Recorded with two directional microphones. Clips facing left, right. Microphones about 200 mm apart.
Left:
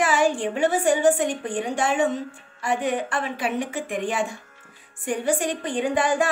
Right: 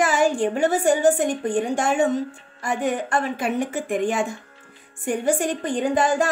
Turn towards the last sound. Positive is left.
turn(degrees=-40)  # may be behind; listen again after turning